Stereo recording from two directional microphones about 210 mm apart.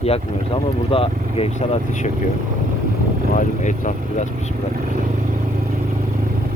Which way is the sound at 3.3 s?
35° left (ahead or behind).